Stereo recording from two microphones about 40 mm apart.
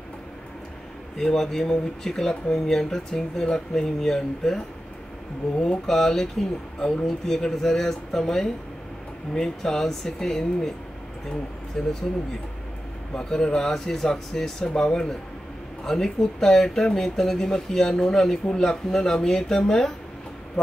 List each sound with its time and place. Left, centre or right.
1.1 s speech: centre
11.7 s speech: centre
13.1 s speech: centre
15.8 s speech: centre